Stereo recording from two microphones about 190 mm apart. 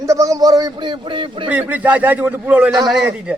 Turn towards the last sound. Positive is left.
turn(degrees=-5)  # may be behind; listen again after turning